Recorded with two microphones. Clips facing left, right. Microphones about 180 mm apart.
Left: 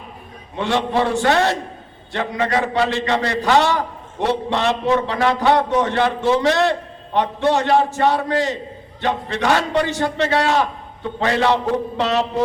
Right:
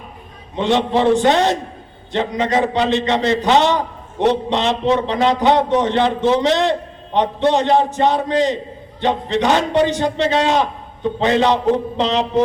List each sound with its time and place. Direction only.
0.5 s a man's voice: 20° right (ahead or behind)